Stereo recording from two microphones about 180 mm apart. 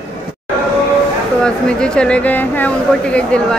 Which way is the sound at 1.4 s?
5° left (ahead or behind).